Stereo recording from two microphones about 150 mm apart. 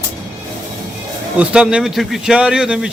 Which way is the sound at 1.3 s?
5° right (ahead or behind).